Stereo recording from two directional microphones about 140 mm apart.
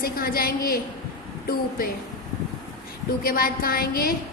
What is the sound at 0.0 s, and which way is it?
Speech, 90° left.